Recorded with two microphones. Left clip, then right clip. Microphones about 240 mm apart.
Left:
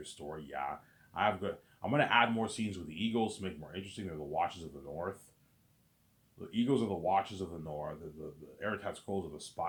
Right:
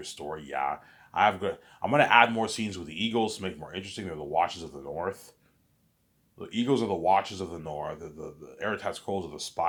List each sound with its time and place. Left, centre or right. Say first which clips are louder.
0.0 s speech: right 8 dB; right
6.5 s speech: right 6 dB; right